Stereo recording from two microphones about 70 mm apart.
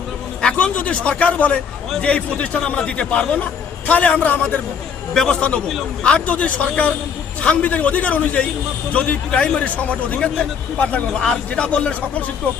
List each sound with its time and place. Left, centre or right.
0.4 s a man's voice: centre
5.1 s a man's voice: centre